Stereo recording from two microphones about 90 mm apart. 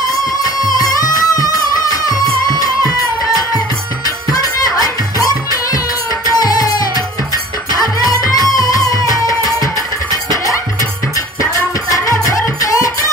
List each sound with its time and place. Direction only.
0.4 s music: 45° left (ahead or behind)
4.3 s music: 45° left (ahead or behind)
10.3 s music: 35° left (ahead or behind)